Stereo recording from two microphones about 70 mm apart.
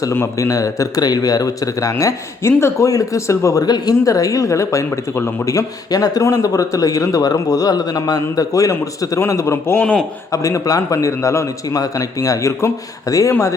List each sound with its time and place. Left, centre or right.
0.3 s speech: left
3.7 s a man's voice: left
11.8 s speech: left